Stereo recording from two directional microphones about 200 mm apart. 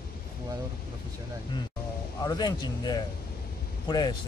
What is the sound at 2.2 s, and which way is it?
Speech, 20° left (ahead or behind).